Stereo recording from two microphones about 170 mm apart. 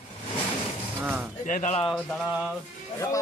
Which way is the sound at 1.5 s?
50° left (ahead or behind).